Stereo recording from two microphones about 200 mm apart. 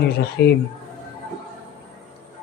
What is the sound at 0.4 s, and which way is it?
Speech, 55° left (ahead or behind).